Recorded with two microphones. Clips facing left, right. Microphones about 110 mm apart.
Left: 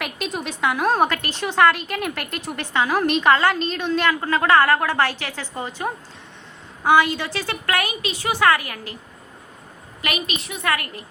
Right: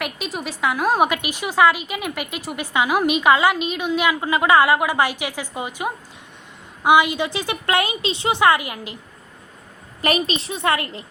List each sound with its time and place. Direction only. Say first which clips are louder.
0.0 s a woman's voice: even; centre (ahead or behind)
0.9 s a woman's voice: right 1 dB; 10° right (ahead or behind)
10.0 s a woman's voice: right 6 dB; 30° right (ahead or behind)